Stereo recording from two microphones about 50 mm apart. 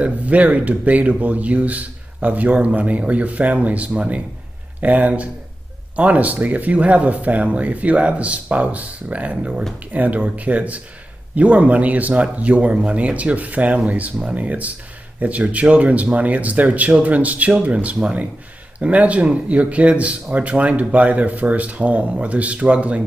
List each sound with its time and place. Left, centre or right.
0.0 s speech: right